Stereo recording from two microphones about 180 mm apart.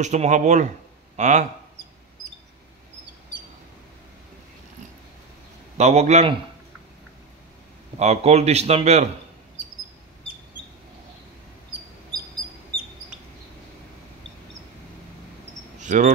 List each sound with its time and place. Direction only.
0.0 s speech: 40° right (ahead or behind)
5.8 s speech: 40° right (ahead or behind)
8.0 s speech: 35° right (ahead or behind)
15.8 s cricket: 45° right (ahead or behind)